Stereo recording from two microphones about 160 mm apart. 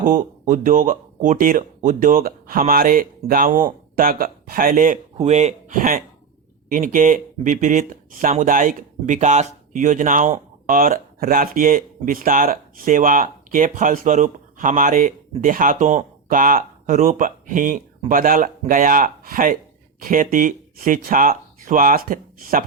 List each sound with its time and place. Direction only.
0.0 s speech: 55° right (ahead or behind)